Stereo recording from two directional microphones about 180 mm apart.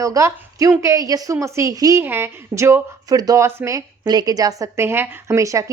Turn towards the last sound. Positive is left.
turn(degrees=-15)  # may be behind; listen again after turning